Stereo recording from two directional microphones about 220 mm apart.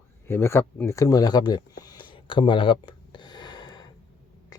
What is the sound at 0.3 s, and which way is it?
Speech, 10° left (ahead or behind).